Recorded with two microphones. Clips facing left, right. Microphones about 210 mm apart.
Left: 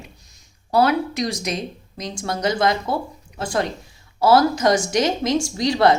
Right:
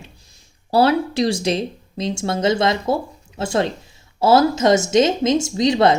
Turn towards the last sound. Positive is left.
turn(degrees=-20)  # may be behind; listen again after turning